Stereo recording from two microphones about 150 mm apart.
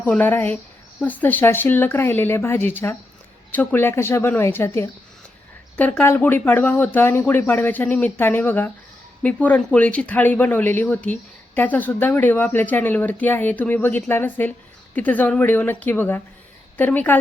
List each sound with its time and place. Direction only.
0.0 s speech: 10° left (ahead or behind)